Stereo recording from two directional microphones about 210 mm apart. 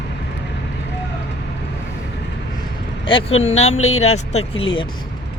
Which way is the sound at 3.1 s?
25° left (ahead or behind).